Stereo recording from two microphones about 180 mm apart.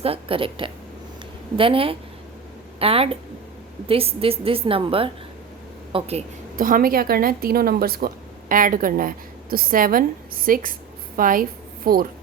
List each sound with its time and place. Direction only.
0.0 s a woman's voice: 30° right (ahead or behind)
6.6 s speech: 50° right (ahead or behind)